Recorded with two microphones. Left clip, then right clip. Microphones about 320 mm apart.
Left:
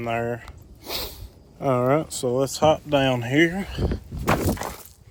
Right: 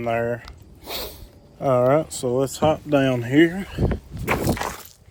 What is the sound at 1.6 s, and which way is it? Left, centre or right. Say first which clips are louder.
Speech: right 3 dB; centre.